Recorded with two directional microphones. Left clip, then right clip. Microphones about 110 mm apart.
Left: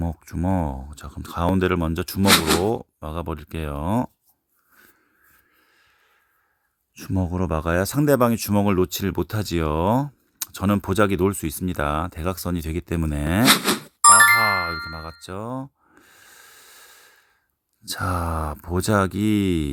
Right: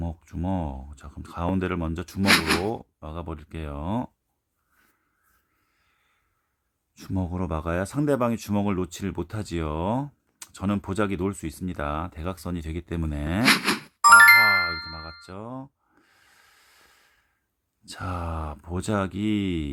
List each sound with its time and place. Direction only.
0.0 s speech: 35° left (ahead or behind)
2.2 s speech: centre (ahead or behind)
2.6 s speech: 35° left (ahead or behind)
6.9 s speech: 30° left (ahead or behind)
13.4 s a sound: centre (ahead or behind)
14.0 s music: 20° right (ahead or behind)
14.4 s a sound: 30° left (ahead or behind)
17.8 s speech: 45° left (ahead or behind)